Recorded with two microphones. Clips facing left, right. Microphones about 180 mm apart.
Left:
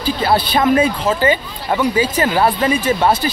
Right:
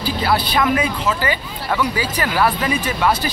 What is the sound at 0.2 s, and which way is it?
Speech, 25° left (ahead or behind).